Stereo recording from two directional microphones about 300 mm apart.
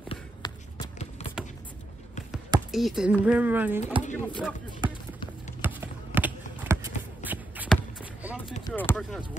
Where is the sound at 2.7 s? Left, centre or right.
Centre.